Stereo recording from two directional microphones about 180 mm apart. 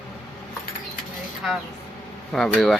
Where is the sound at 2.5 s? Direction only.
Centre (ahead or behind).